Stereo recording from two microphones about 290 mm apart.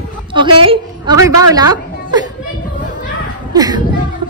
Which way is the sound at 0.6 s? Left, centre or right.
Centre.